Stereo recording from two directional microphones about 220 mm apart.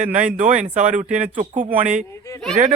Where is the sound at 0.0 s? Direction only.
35° right (ahead or behind).